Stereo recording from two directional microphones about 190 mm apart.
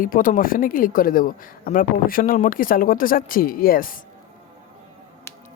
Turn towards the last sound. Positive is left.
turn(degrees=50)  # may be behind; listen again after turning